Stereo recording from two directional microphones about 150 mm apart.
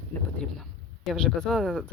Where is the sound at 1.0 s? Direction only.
Centre (ahead or behind).